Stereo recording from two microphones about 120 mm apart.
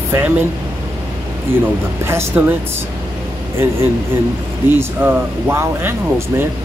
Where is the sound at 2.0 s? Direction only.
20° right (ahead or behind).